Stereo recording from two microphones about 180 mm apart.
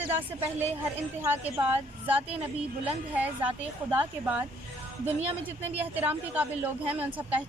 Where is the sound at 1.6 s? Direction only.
10° right (ahead or behind).